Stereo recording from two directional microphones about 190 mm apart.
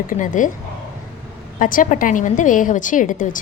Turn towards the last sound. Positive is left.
turn(degrees=45)  # may be behind; listen again after turning